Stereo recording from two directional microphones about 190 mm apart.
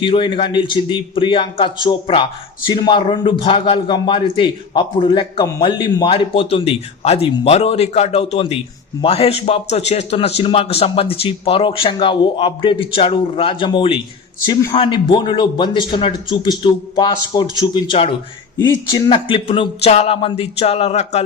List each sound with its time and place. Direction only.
0.0 s a man's voice: 25° left (ahead or behind)